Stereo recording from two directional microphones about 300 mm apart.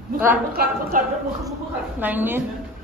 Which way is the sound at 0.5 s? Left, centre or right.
Right.